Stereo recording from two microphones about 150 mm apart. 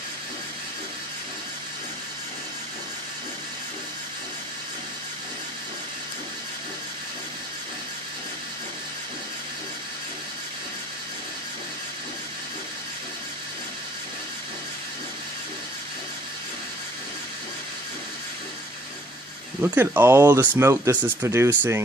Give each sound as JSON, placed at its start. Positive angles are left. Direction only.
{"t": 19.6, "sound": "speech", "side_deg": -10}